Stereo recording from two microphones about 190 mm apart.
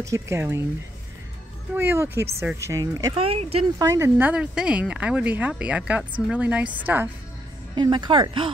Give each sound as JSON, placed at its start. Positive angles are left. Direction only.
{"t": 0.0, "sound": "speech", "side_deg": -15}
{"t": 1.8, "sound": "speech", "side_deg": -15}
{"t": 7.7, "sound": "a woman's voice", "side_deg": -25}